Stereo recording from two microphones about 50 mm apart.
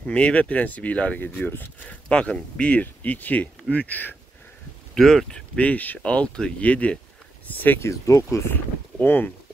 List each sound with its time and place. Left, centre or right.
0.0 s speech: left
4.9 s speech: centre
5.3 s speech: left
7.4 s speech: left
7.8 s speech: left
9.0 s speech: left